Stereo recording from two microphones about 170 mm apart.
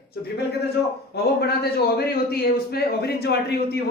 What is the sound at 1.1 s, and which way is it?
A man's voice, 70° left (ahead or behind).